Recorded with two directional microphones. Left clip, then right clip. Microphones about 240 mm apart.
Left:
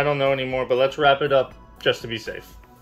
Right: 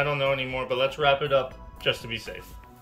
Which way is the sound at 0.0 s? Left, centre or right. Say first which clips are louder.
Left 4 dB; centre.